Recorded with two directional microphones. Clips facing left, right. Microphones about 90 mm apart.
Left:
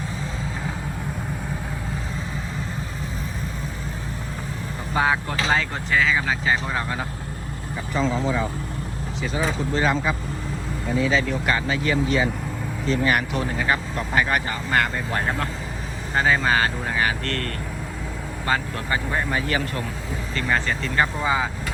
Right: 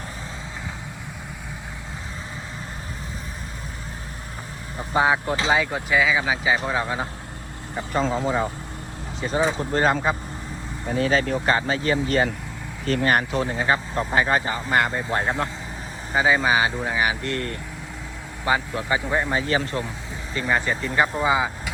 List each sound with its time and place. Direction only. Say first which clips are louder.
4.9 s speech: right 2 dB; 20° right (ahead or behind)
5.5 s speech: right 1 dB; 10° right (ahead or behind)
9.2 s speech: right 3 dB; 35° right (ahead or behind)
16.1 s speech: right 1 dB; 10° right (ahead or behind); by 19.8 s 25° right (ahead or behind)
20.4 s speech: right 1 dB; 15° right (ahead or behind)